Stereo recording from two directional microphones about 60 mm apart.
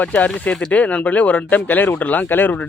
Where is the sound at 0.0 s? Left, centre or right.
Left.